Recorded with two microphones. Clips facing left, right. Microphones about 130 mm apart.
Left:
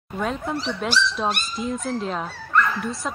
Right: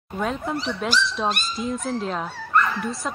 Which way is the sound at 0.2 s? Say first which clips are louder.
Even; centre (ahead or behind).